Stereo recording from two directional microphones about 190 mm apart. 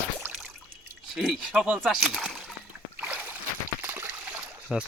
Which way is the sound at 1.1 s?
Centre (ahead or behind).